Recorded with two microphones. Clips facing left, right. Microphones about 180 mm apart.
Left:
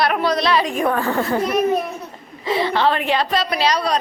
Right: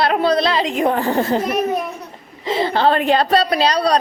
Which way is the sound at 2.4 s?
25° right (ahead or behind).